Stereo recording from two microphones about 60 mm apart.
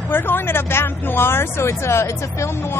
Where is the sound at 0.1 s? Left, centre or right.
Left.